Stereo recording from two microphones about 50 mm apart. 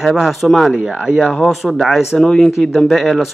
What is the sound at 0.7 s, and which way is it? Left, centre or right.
Speech, centre.